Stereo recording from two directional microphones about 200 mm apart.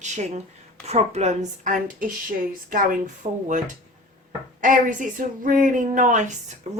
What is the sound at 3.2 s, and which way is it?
Speech, 30° right (ahead or behind).